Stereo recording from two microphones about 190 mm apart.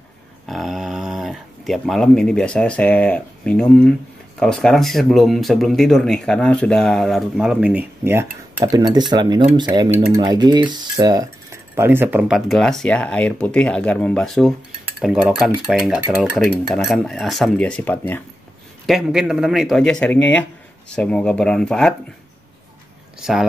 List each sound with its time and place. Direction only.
0.5 s speech: centre (ahead or behind)
16.4 s speech: centre (ahead or behind)
18.9 s speech: centre (ahead or behind)
23.1 s speech: centre (ahead or behind)